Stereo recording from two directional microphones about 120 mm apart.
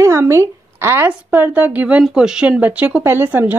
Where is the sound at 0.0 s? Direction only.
25° right (ahead or behind).